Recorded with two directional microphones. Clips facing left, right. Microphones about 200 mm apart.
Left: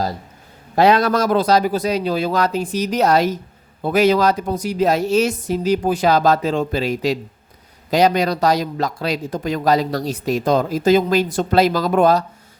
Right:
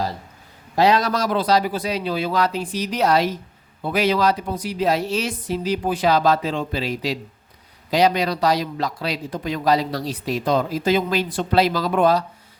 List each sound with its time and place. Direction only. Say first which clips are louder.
0.8 s a man's voice: left 3 dB; 55° left (ahead or behind)